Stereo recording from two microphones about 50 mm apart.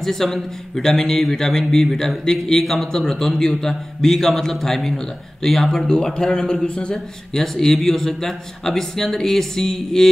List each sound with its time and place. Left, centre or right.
0.0 s speech: centre
5.9 s speech: centre